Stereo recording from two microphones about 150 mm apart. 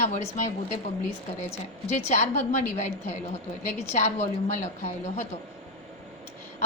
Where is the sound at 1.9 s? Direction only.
50° left (ahead or behind).